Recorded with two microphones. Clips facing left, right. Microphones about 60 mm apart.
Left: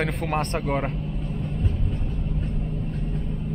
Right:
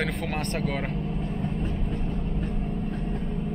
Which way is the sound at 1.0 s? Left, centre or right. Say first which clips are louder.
Right 1 dB; right.